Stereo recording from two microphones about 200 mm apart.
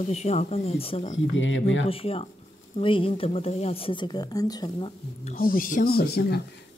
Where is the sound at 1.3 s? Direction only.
70° left (ahead or behind).